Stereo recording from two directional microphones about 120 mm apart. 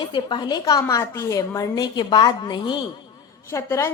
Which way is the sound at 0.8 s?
25° left (ahead or behind).